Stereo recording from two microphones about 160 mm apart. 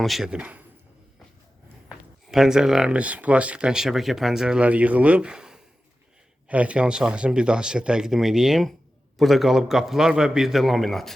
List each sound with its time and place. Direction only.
0.0 s speech: centre (ahead or behind)
2.2 s speech: 5° right (ahead or behind)